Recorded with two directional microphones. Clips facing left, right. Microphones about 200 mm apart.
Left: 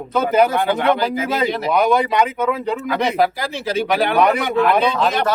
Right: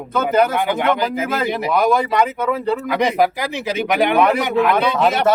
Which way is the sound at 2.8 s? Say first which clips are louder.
Even; 15° right (ahead or behind).